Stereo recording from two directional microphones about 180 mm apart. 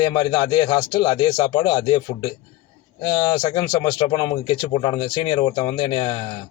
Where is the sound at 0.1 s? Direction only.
25° left (ahead or behind).